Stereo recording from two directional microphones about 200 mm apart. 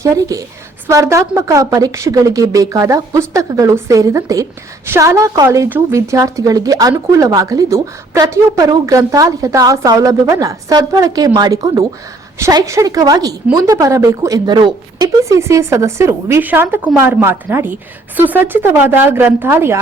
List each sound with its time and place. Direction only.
0.0 s a woman's voice: 15° right (ahead or behind)